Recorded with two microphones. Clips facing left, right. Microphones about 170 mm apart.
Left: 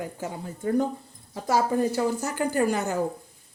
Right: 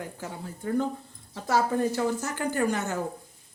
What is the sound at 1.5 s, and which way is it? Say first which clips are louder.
Speech: left 2 dB; 10° left (ahead or behind).